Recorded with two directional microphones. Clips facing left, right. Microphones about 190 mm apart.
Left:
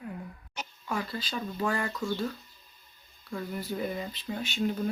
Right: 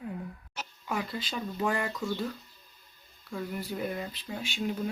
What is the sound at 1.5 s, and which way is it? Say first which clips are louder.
Speech: right 1 dB; 15° right (ahead or behind).